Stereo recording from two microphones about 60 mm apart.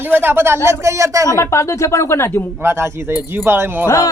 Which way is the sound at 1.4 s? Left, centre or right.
Left.